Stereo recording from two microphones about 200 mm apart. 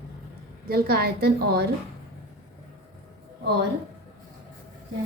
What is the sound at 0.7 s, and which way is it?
A woman's voice, 50° right (ahead or behind).